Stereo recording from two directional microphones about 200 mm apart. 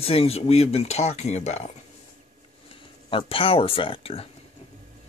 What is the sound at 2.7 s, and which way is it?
Speech, 25° left (ahead or behind).